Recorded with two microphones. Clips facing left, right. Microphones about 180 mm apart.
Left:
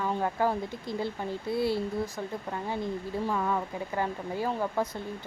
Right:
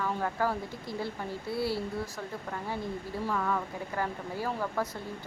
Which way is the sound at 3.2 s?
20° left (ahead or behind).